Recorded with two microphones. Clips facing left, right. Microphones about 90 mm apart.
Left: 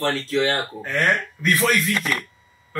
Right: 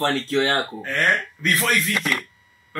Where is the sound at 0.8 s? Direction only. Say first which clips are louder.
Even; 20° left (ahead or behind).